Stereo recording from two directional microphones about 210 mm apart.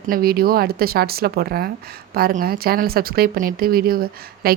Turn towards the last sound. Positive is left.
turn(degrees=-45)  # may be behind; listen again after turning